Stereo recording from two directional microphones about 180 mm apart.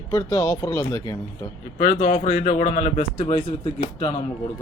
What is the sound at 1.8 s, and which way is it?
Speech, 35° left (ahead or behind).